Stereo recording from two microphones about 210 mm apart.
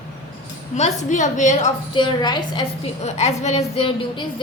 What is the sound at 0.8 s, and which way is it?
A woman's voice, 35° left (ahead or behind).